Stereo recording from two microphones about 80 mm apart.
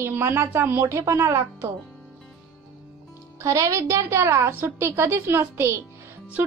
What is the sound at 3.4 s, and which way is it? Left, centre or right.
A woman's voice, right.